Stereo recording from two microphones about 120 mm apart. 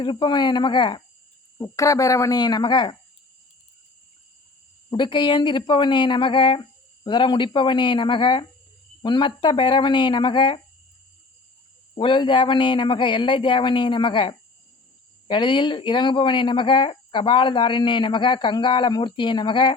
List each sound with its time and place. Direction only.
0.0 s speech: 40° left (ahead or behind)
1.5 s speech: 25° left (ahead or behind)
4.9 s speech: 40° left (ahead or behind)
11.9 s speech: 40° left (ahead or behind)